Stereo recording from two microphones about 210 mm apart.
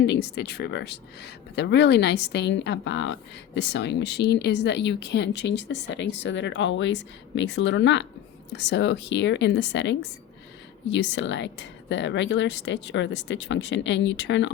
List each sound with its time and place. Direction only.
0.0 s speech: 50° left (ahead or behind)